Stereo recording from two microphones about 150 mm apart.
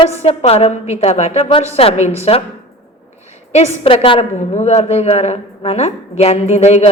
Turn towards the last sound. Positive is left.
turn(degrees=45)  # may be behind; listen again after turning